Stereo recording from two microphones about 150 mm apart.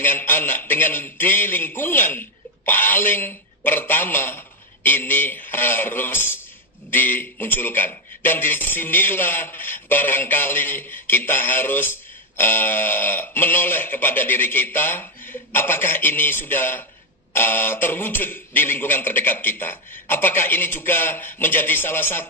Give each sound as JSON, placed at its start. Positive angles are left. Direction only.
{"t": 0.0, "sound": "a man's voice", "side_deg": 15}